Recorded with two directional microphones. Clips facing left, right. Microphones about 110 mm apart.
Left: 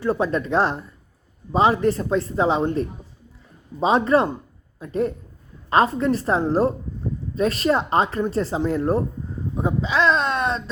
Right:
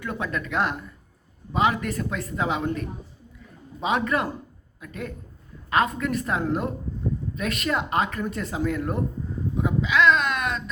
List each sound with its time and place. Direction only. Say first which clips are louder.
0.0 s speech: left 8 dB; 30° left (ahead or behind)